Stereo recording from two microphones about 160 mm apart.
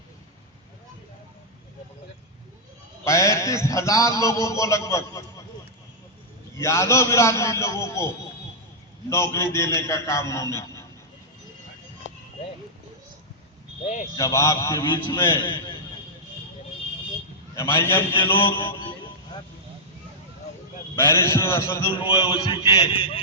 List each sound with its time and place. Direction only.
3.0 s a man's voice: 20° left (ahead or behind)
6.6 s a man's voice: 15° left (ahead or behind)
14.2 s a man's voice: 20° left (ahead or behind)
17.5 s a man's voice: 15° left (ahead or behind)
20.9 s a man's voice: 15° left (ahead or behind)
21.9 s a man's voice: 35° left (ahead or behind)